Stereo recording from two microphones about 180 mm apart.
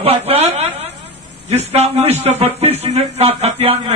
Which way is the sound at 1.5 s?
35° right (ahead or behind).